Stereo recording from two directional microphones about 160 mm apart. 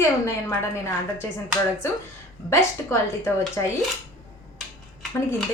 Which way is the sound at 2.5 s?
15° left (ahead or behind).